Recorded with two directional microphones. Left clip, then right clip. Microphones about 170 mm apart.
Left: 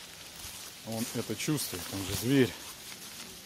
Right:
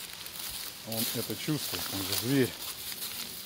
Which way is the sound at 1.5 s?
30° left (ahead or behind).